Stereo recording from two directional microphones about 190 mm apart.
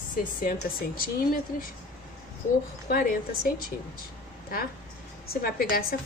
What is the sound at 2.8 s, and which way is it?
Speech, 55° left (ahead or behind).